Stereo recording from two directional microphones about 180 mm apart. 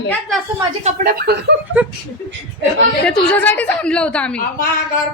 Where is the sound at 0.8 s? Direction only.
40° right (ahead or behind).